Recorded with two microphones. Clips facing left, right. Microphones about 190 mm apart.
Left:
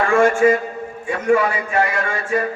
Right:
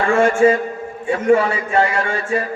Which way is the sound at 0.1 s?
30° right (ahead or behind).